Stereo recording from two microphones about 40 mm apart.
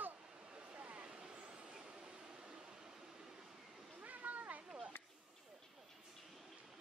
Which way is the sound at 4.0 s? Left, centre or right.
Right.